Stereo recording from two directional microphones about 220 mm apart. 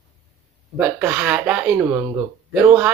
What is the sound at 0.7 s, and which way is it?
A man's voice, 10° right (ahead or behind).